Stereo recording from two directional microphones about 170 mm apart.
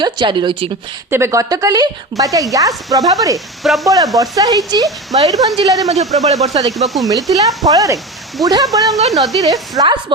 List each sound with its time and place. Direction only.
0.0 s speech: 25° right (ahead or behind)
1.1 s speech: 15° right (ahead or behind)
3.3 s speech: centre (ahead or behind)
3.8 s speech: 20° right (ahead or behind)
6.2 s speech: 40° right (ahead or behind)
6.5 s speech: 25° right (ahead or behind)
6.7 s speech: centre (ahead or behind)
7.1 s speech: 20° right (ahead or behind)
9.0 s speech: centre (ahead or behind)
9.4 s speech: 20° right (ahead or behind)